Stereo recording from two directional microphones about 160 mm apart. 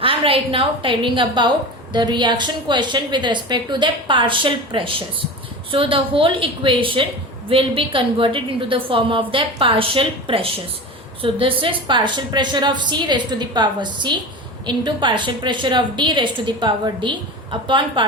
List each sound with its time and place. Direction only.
0.0 s a woman's voice: 35° right (ahead or behind)